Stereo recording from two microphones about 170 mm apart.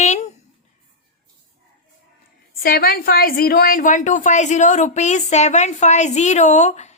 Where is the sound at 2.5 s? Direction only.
60° left (ahead or behind).